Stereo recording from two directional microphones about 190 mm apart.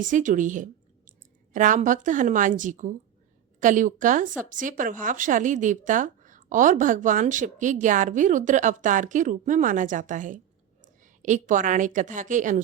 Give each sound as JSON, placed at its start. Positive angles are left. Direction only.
{"t": 0.0, "sound": "a woman's voice", "side_deg": -40}